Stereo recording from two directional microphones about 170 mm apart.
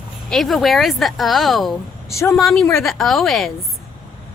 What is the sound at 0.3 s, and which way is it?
Speech, centre (ahead or behind).